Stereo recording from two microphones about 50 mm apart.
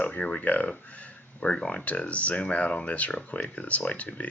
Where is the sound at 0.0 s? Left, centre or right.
Left.